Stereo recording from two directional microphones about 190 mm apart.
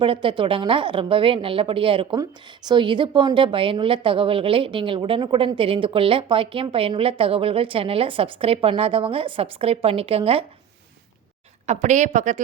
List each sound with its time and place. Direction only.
0.0 s a woman's voice: 25° right (ahead or behind)
11.6 s a woman's voice: 40° right (ahead or behind)